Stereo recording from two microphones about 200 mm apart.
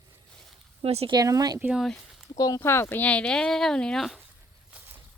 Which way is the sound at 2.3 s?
15° left (ahead or behind).